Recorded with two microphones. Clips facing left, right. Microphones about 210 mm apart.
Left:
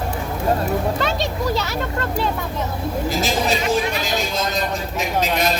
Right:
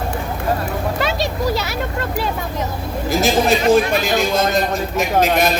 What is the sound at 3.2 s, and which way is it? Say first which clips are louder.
A man's voice: right 8 dB; 50° right (ahead or behind).